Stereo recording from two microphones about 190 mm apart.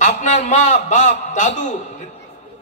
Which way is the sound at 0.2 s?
40° left (ahead or behind).